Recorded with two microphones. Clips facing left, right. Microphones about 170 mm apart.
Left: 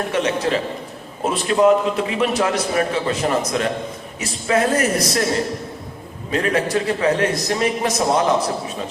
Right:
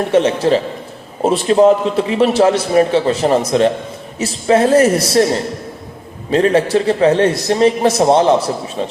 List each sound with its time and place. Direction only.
0.1 s a man's voice: 30° right (ahead or behind)
6.3 s a man's voice: 30° right (ahead or behind)